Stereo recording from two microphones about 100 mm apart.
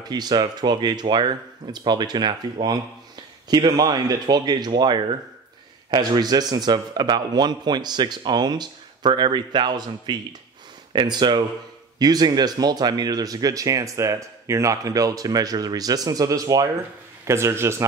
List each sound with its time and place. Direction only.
0.0 s a man's voice: 45° right (ahead or behind); by 17.8 s 25° right (ahead or behind)